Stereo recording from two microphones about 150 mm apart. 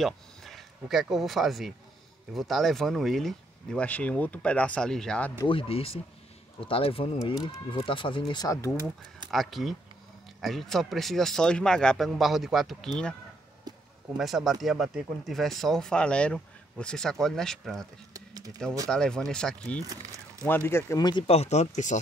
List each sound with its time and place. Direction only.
0.0 s speech: centre (ahead or behind)
5.5 s speech: 40° left (ahead or behind); by 8.7 s 20° left (ahead or behind)
9.3 s speech: centre (ahead or behind)
13.7 s a sound: 25° right (ahead or behind)
14.1 s speech: centre (ahead or behind)
18.1 s a sound: 25° right (ahead or behind)
18.9 s speech: 5° left (ahead or behind)
19.9 s speech: 25° right (ahead or behind)
20.4 s speech: 15° left (ahead or behind)
21.0 s speech: 30° left (ahead or behind); by 22.0 s 55° left (ahead or behind)